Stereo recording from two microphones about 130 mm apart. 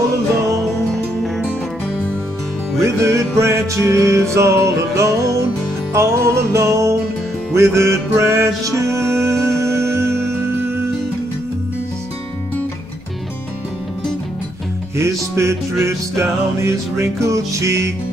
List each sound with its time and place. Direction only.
0.9 s music: centre (ahead or behind)
2.8 s music: 20° right (ahead or behind)
15.0 s music: 20° right (ahead or behind)